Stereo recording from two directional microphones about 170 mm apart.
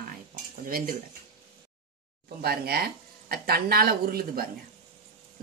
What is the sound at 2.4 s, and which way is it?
Speech, 65° right (ahead or behind).